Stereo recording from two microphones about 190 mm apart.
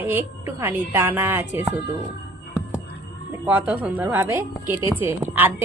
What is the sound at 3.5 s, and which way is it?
A woman's voice, 10° right (ahead or behind).